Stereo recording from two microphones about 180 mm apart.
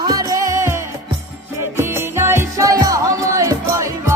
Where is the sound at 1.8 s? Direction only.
15° right (ahead or behind).